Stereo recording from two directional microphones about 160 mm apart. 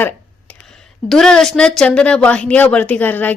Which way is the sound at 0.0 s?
5° left (ahead or behind).